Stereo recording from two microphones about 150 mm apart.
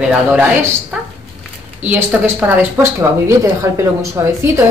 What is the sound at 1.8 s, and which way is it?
Speech, 10° right (ahead or behind).